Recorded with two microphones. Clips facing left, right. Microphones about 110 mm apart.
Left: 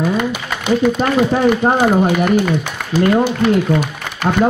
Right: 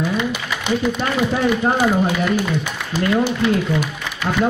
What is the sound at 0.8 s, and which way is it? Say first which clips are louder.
Speech: left 7 dB; 45° left (ahead or behind).